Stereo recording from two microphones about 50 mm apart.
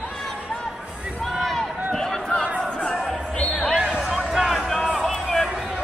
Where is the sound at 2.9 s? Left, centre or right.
Centre.